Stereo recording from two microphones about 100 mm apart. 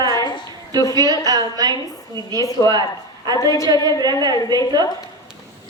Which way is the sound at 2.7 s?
45° right (ahead or behind).